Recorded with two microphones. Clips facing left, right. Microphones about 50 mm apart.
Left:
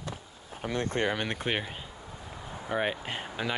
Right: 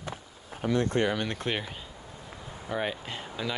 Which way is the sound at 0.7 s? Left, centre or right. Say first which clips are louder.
Right 3 dB; left.